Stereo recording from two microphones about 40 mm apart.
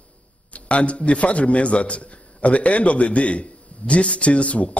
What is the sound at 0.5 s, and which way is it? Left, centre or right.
A man's voice, left.